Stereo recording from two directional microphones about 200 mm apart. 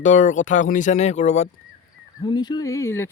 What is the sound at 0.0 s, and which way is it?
Speech, 40° left (ahead or behind).